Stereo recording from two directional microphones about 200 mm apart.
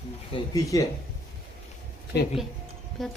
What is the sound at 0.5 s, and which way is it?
Speech, 15° left (ahead or behind).